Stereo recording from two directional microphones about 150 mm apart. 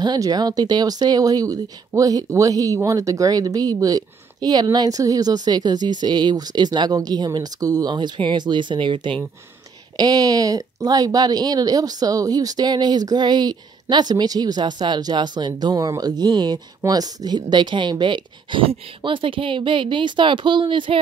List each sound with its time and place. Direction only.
0.0 s speech: 25° right (ahead or behind)